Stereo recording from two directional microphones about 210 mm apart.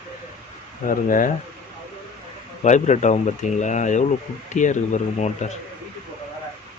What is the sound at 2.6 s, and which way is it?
Speech, 35° left (ahead or behind).